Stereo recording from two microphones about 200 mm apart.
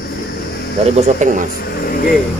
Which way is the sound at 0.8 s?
35° right (ahead or behind).